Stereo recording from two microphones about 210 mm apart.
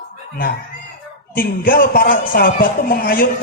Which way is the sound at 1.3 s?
45° left (ahead or behind).